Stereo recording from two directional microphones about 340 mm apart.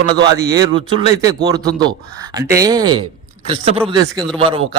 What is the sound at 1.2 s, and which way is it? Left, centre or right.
Speech, centre.